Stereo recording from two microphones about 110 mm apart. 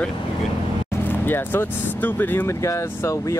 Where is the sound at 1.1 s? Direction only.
20° left (ahead or behind).